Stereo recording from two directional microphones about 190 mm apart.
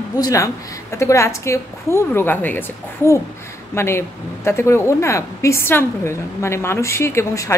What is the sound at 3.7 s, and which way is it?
A woman's voice, 15° left (ahead or behind).